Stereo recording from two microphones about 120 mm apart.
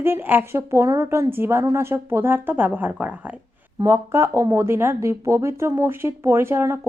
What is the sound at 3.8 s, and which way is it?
A woman's voice, 25° right (ahead or behind).